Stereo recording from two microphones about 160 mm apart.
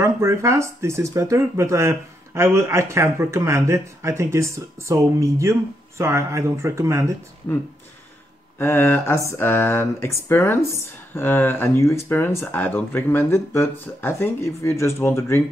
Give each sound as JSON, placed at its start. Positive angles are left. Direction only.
{"t": 0.0, "sound": "speech", "side_deg": -20}
{"t": 7.5, "sound": "speech", "side_deg": 15}